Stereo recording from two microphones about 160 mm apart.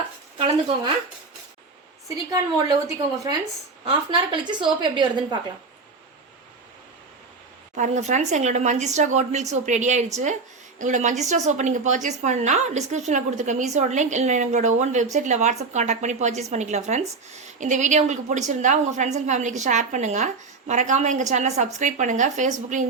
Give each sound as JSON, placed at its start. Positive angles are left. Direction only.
{"t": 2.0, "sound": "a woman's voice", "side_deg": -20}
{"t": 7.8, "sound": "a woman's voice", "side_deg": -45}